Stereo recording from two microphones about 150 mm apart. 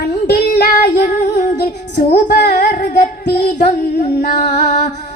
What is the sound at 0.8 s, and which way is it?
Female singing, 90° left.